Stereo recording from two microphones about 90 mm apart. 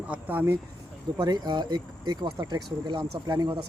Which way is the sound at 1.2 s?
50° right (ahead or behind).